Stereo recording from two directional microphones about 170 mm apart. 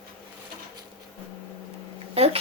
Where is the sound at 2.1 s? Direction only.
35° right (ahead or behind).